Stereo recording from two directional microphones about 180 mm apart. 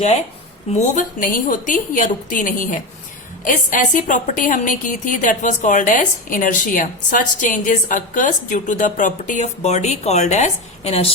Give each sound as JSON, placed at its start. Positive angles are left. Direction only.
{"t": 0.8, "sound": "a woman's voice", "side_deg": 50}